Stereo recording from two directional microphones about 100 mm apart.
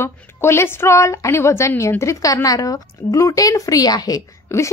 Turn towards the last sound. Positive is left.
turn(degrees=35)  # may be behind; listen again after turning